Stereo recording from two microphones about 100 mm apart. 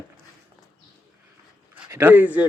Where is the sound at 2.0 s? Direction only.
20° right (ahead or behind).